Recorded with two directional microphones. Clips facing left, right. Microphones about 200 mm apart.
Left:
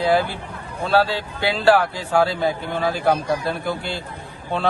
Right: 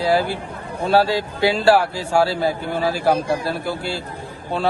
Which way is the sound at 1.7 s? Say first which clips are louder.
Right 1 dB; 10° right (ahead or behind).